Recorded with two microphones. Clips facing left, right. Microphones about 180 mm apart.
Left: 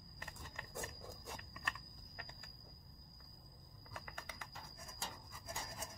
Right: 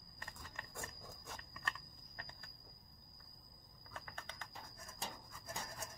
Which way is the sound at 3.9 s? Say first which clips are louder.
Even; 10° left (ahead or behind).